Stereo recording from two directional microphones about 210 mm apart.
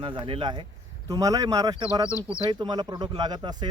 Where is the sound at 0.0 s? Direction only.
25° right (ahead or behind).